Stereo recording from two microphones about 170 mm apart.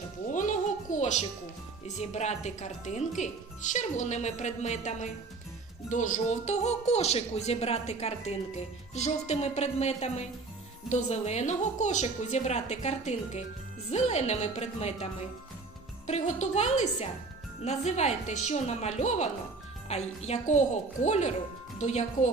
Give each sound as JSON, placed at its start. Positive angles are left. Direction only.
{"t": 0.3, "sound": "a sound", "side_deg": 50}
{"t": 2.0, "sound": "speech", "side_deg": 40}
{"t": 16.0, "sound": "speech", "side_deg": 40}